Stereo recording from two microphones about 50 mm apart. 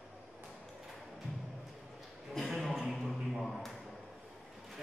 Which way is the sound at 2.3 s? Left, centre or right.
Centre.